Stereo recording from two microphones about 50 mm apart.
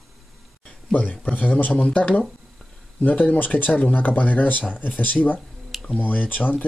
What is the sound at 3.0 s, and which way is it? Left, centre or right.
Speech, left.